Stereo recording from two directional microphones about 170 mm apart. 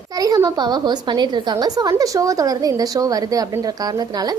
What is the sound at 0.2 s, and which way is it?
Speech, 20° right (ahead or behind).